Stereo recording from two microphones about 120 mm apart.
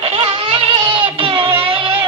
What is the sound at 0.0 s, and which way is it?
Music, 55° right (ahead or behind).